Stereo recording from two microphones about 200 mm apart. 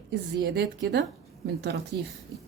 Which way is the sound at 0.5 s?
55° right (ahead or behind).